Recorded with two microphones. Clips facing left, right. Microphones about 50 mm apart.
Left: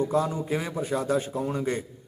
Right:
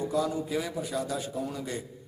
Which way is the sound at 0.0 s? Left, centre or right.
Left.